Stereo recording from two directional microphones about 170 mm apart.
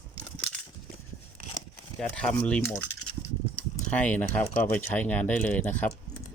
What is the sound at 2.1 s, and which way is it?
Speech, 5° left (ahead or behind).